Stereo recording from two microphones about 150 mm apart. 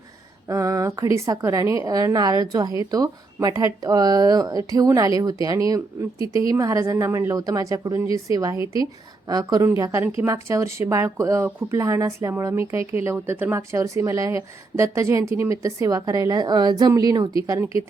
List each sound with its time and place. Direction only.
0.4 s a woman's voice: 20° right (ahead or behind)